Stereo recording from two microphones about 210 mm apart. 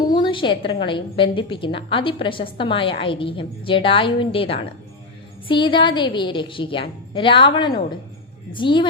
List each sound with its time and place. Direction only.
0.0 s a woman's voice: 20° left (ahead or behind)